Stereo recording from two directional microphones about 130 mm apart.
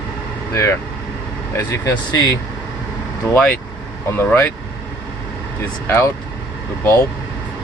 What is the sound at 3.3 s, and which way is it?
Speech, 10° left (ahead or behind).